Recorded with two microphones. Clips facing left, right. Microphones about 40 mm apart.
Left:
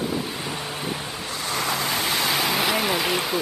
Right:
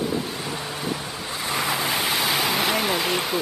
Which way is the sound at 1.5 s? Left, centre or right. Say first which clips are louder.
Right 1 dB; centre.